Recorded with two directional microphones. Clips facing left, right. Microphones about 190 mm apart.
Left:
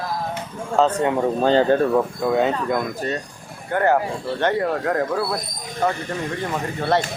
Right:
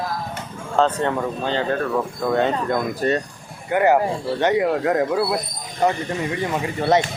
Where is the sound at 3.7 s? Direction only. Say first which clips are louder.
Right 2 dB; 10° right (ahead or behind).